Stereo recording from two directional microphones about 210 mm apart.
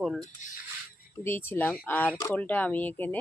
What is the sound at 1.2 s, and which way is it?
Speech, 10° left (ahead or behind).